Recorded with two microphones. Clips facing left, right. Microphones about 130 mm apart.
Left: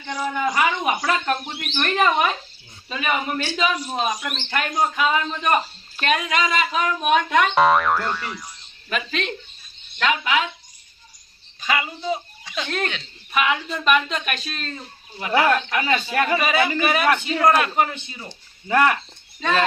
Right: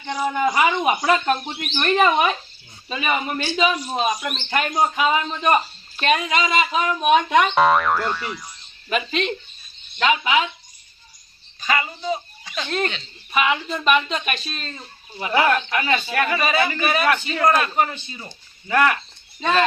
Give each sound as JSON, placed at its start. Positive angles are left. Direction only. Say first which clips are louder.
{"t": 0.0, "sound": "a man's voice", "louder": "right 3 dB", "side_deg": -15}
{"t": 11.7, "sound": "a man's voice", "louder": "right 1 dB", "side_deg": 5}
{"t": 17.3, "sound": "speech", "louder": "left 1 dB", "side_deg": 5}
{"t": 18.7, "sound": "speech", "louder": "even", "side_deg": 25}